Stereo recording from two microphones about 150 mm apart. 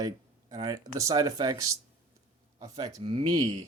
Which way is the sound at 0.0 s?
30° right (ahead or behind).